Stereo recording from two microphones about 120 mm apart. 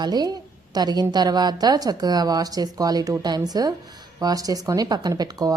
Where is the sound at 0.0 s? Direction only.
35° right (ahead or behind).